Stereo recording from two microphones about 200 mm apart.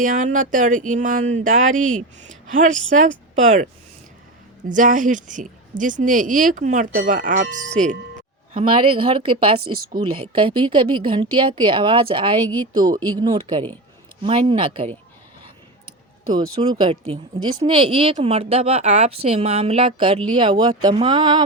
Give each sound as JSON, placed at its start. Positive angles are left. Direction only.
{"t": 0.0, "sound": "a woman's voice", "side_deg": -40}
{"t": 4.7, "sound": "a woman's voice", "side_deg": -40}
{"t": 7.8, "sound": "speech", "side_deg": -30}
{"t": 16.3, "sound": "speech", "side_deg": -20}